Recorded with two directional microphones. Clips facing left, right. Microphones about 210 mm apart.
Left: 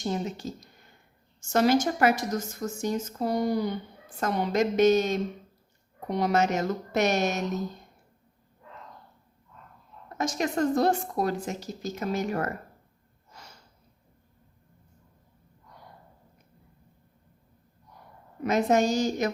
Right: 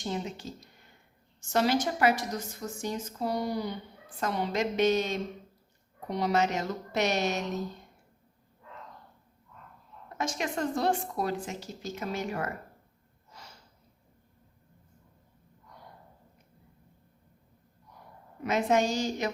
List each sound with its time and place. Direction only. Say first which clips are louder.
0.0 s a woman's voice: left 4 dB; 40° left (ahead or behind)
10.2 s a woman's voice: left 5 dB; 40° left (ahead or behind)
18.4 s a woman's voice: left 3 dB; 40° left (ahead or behind)